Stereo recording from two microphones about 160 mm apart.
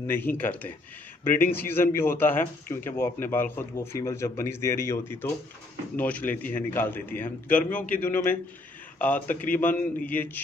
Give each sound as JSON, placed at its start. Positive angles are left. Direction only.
{"t": 0.0, "sound": "a man's voice", "side_deg": 15}